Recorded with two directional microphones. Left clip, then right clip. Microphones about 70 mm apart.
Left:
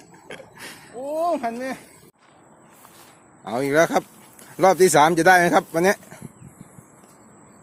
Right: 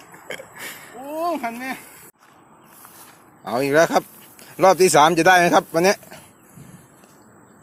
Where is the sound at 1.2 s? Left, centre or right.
Left.